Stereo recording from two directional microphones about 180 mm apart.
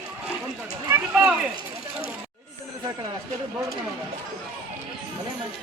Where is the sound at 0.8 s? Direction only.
5° right (ahead or behind).